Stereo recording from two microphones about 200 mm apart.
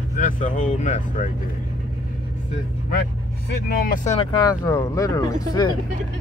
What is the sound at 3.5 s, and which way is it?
Speech, 50° left (ahead or behind).